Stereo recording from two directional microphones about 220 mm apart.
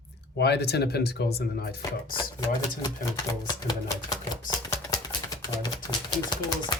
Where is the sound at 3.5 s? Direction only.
15° left (ahead or behind).